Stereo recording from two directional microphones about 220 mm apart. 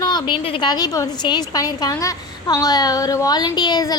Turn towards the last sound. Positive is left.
turn(degrees=20)  # may be behind; listen again after turning